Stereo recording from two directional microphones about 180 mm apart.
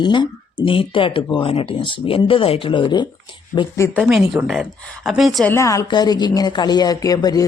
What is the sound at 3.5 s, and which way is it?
Speech, 15° left (ahead or behind).